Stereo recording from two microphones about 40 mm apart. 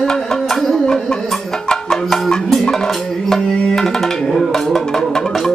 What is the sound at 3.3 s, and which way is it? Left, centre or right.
Tabla, centre.